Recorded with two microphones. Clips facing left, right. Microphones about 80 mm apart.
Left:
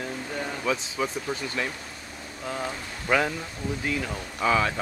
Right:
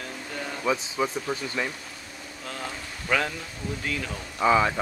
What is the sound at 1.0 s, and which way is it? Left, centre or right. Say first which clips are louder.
Speech: right 1 dB; centre.